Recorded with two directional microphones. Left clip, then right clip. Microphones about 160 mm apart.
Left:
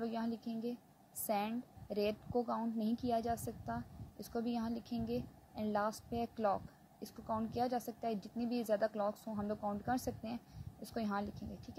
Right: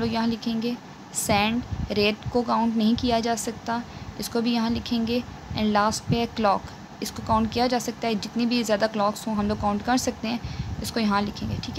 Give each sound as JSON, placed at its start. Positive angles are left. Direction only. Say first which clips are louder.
{"t": 0.0, "sound": "a woman's voice", "louder": "right 15 dB", "side_deg": 15}